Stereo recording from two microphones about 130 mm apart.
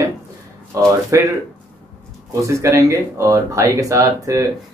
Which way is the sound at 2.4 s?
25° right (ahead or behind).